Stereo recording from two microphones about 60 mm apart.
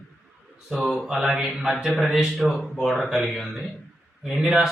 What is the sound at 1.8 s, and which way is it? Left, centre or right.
Speech, centre.